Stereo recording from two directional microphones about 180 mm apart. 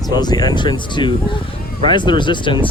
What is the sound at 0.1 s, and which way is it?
Speech, 25° left (ahead or behind).